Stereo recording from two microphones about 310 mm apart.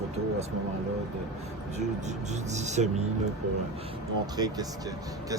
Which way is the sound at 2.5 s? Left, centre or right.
Right.